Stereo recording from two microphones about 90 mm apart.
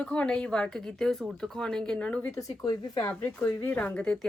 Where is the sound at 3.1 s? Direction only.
25° left (ahead or behind).